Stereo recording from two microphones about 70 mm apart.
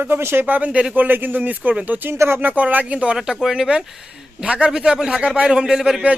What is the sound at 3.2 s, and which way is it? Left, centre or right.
Speech, centre.